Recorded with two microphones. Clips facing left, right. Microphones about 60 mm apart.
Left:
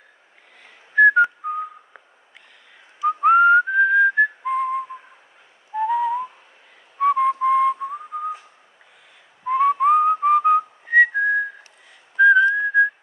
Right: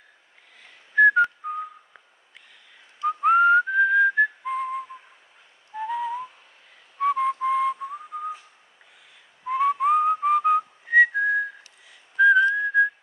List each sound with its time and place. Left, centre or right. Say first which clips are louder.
0.9 s whistling: left 3 dB; centre
3.0 s whistling: left 4 dB; centre
9.5 s whistling: left 4 dB; centre